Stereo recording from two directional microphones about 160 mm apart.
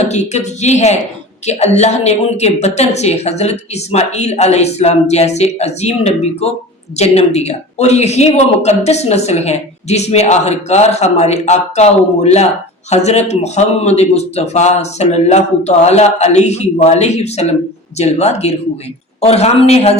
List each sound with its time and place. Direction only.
0.0 s a man's voice: 45° left (ahead or behind)